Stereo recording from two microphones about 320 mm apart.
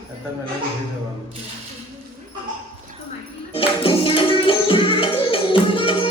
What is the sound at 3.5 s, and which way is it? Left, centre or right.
Music, centre.